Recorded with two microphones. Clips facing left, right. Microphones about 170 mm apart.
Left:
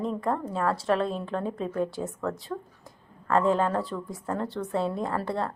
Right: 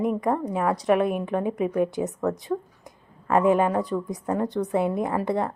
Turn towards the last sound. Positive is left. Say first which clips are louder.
# right 4 dB
turn(degrees=-15)  # may be behind; listen again after turning